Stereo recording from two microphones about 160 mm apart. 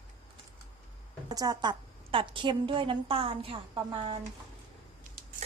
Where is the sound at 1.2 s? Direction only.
25° right (ahead or behind).